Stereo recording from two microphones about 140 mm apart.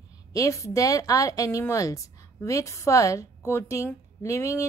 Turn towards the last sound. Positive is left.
turn(degrees=20)  # may be behind; listen again after turning